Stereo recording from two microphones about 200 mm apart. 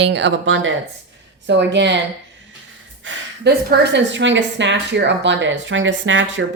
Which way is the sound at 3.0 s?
60° right (ahead or behind).